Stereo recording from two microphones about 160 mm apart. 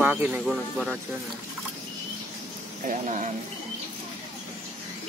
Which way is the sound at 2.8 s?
45° right (ahead or behind).